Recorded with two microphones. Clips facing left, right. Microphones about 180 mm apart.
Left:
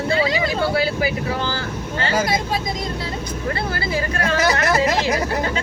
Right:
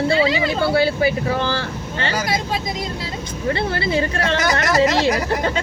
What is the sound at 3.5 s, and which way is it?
Speech, 25° right (ahead or behind).